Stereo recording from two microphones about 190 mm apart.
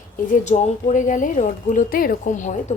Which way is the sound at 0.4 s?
35° left (ahead or behind).